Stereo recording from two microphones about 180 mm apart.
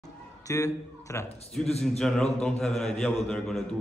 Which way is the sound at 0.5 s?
15° left (ahead or behind).